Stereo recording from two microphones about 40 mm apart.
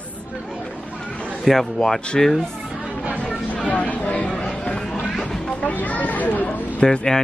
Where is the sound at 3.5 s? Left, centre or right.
Left.